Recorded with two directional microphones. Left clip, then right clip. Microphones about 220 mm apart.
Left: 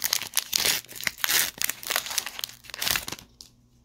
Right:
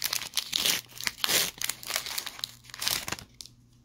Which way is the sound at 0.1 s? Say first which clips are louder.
Left 3 dB; 15° left (ahead or behind).